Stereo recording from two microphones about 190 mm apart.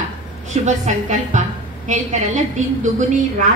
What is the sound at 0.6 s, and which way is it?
A woman's voice, 40° right (ahead or behind).